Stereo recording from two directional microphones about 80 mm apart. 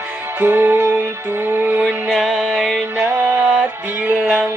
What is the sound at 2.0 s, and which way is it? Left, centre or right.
Music, centre.